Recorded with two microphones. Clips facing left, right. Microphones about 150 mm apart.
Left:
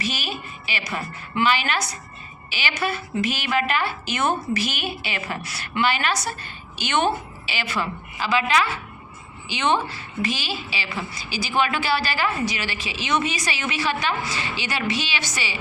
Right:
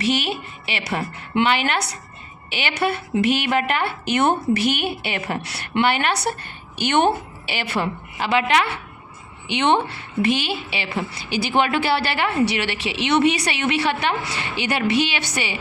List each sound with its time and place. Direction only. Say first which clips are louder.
0.0 s a woman's voice: right 7 dB; 65° right (ahead or behind)